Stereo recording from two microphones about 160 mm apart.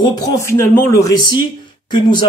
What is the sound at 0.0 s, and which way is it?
Speech, 25° left (ahead or behind).